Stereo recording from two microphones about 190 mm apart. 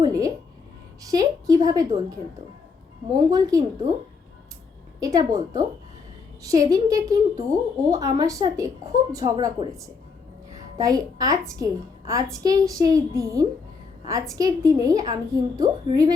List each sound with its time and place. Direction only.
0.0 s a sound: 20° right (ahead or behind)
1.0 s a woman's voice: 20° right (ahead or behind)
3.2 s a woman's voice: 20° right (ahead or behind)
4.9 s a woman's voice: 20° right (ahead or behind)